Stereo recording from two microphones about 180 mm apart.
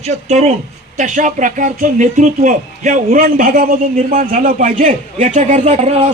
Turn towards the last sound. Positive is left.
turn(degrees=-35)  # may be behind; listen again after turning